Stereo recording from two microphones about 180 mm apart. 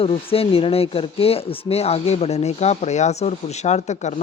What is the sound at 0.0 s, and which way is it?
Speech, 30° left (ahead or behind).